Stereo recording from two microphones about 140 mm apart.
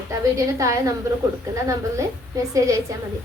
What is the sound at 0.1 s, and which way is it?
Speech, 20° right (ahead or behind).